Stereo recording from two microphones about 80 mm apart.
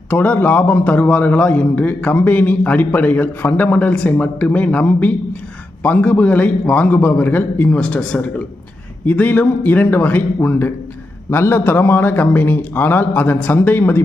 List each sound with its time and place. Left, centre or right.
0.1 s a man's voice: left